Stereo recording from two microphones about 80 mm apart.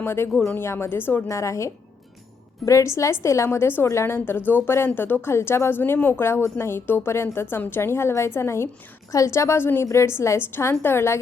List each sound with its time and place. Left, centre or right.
0.0 s a woman's voice: left
1.3 s a woman's voice: left